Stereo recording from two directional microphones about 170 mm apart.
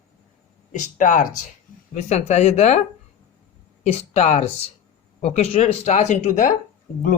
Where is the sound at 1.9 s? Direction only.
40° left (ahead or behind).